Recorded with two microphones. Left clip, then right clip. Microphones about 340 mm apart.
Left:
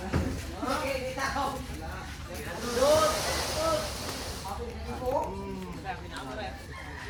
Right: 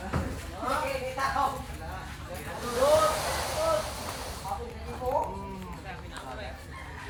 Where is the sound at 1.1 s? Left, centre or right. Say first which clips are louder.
Right 6 dB; centre.